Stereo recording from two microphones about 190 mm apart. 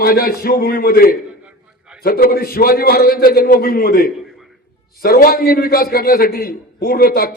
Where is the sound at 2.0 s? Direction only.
50° left (ahead or behind).